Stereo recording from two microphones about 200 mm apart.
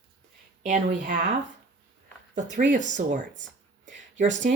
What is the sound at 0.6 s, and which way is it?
Speech, 40° right (ahead or behind).